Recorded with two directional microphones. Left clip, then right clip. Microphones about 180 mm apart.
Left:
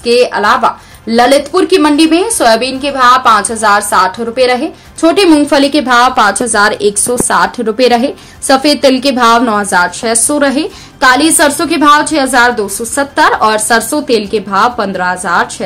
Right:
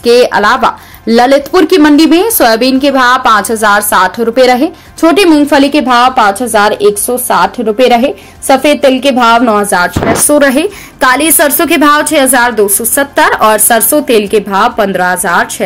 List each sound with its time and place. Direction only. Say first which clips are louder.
0.0 s speech: right 3 dB; 40° right (ahead or behind)
5.5 s speech: right 2 dB; 15° right (ahead or behind)